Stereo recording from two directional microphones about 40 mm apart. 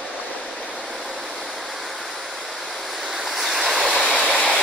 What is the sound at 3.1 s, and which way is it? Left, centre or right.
Waves, centre.